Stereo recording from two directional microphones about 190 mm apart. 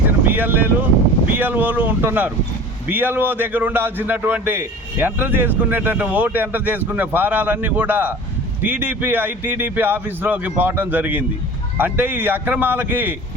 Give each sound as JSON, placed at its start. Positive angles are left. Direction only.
{"t": 0.3, "sound": "a man's voice", "side_deg": -10}